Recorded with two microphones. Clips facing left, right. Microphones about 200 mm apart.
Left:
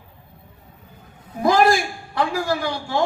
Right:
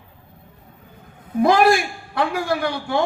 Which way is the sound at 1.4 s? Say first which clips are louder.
Right 2 dB; 60° right (ahead or behind).